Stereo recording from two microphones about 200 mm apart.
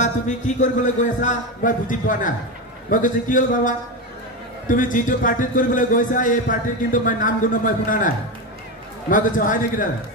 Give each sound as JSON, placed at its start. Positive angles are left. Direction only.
{"t": 0.6, "sound": "a man's voice", "side_deg": 40}
{"t": 9.1, "sound": "a man's voice", "side_deg": 40}